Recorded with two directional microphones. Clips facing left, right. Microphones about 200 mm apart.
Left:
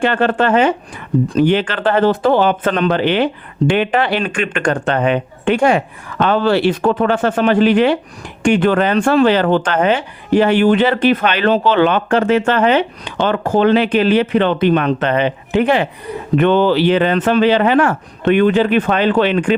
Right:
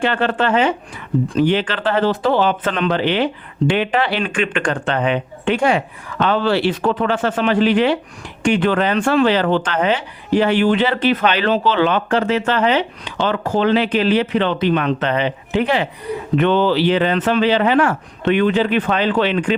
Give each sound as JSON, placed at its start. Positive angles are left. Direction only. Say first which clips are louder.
{"t": 0.0, "sound": "speech", "louder": "left 3 dB", "side_deg": 45}